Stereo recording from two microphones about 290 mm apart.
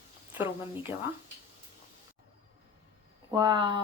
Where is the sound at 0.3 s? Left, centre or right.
Centre.